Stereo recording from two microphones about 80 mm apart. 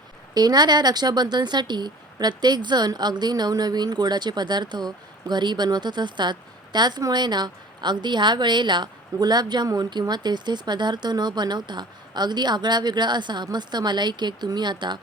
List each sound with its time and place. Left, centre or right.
0.3 s a woman's voice: right
9.1 s speech: right